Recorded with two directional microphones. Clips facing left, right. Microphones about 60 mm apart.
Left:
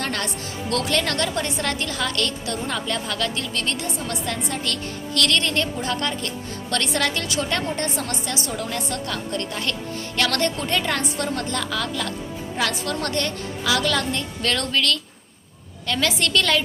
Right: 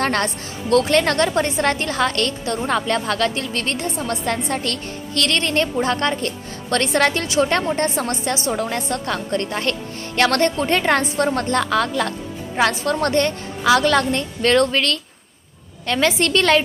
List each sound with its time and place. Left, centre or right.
0.0 s a woman's voice: right